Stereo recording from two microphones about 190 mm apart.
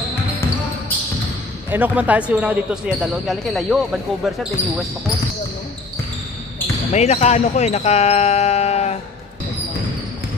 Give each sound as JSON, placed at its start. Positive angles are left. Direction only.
{"t": 1.7, "sound": "speech", "side_deg": -10}
{"t": 6.9, "sound": "speech", "side_deg": 35}